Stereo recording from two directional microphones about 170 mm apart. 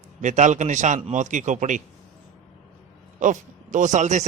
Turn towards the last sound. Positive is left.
turn(degrees=-45)  # may be behind; listen again after turning